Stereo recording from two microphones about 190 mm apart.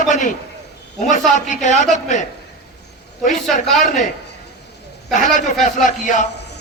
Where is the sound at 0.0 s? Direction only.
40° left (ahead or behind).